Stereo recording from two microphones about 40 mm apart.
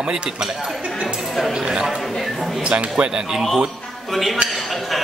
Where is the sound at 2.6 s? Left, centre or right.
Right.